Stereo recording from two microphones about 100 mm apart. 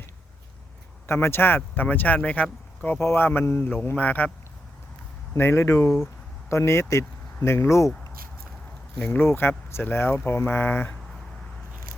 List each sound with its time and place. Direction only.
1.0 s a man's voice: 25° left (ahead or behind)
5.3 s speech: 25° left (ahead or behind)
9.0 s speech: 20° left (ahead or behind)